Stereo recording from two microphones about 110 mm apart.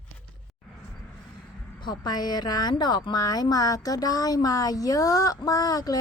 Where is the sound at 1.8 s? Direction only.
40° left (ahead or behind).